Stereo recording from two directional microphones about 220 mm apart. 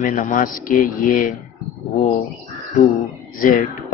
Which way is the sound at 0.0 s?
35° left (ahead or behind).